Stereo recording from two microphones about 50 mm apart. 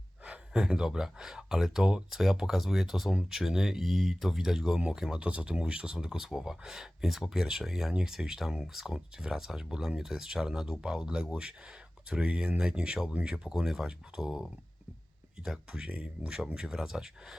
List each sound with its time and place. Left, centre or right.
0.3 s speech: centre
15.9 s speech: right
16.6 s speech: centre